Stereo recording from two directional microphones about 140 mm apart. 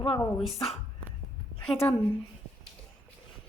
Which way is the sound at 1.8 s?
20° left (ahead or behind).